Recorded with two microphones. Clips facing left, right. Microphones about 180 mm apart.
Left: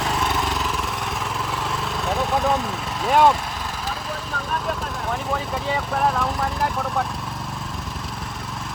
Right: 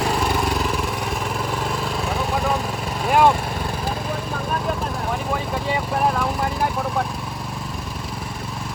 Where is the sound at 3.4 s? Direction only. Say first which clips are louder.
Right 4 dB; 55° right (ahead or behind).